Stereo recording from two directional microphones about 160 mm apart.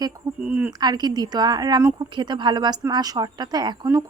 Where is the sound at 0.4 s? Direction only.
10° right (ahead or behind).